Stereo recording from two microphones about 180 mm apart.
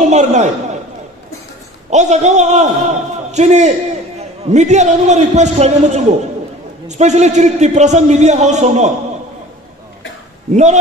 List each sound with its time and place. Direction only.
0.0 s a man's voice: 40° right (ahead or behind)
1.9 s a man's voice: 40° right (ahead or behind)
10.5 s a man's voice: 40° right (ahead or behind)